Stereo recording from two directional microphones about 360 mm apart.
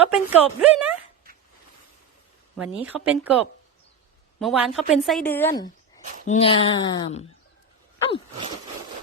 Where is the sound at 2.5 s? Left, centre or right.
Centre.